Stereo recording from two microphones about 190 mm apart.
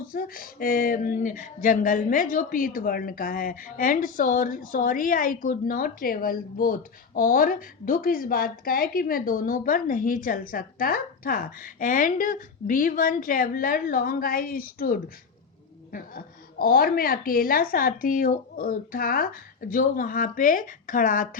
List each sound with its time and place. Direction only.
0.1 s speech: 50° left (ahead or behind)